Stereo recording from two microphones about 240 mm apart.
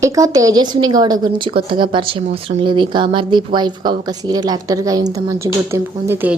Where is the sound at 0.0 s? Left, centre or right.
Centre.